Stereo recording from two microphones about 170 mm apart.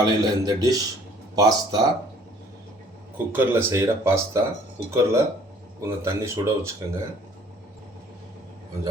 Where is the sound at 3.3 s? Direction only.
15° right (ahead or behind).